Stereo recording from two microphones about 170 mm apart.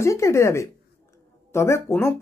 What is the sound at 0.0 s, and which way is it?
A woman's voice, 15° left (ahead or behind).